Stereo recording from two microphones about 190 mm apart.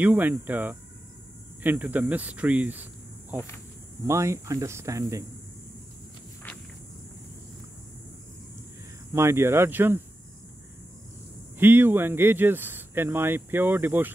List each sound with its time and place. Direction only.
0.0 s speech: 10° right (ahead or behind)
9.1 s speech: 15° right (ahead or behind)
11.5 s speech: 10° right (ahead or behind)